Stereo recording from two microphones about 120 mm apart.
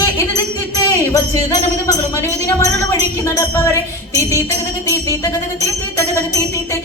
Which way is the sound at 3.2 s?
25° left (ahead or behind).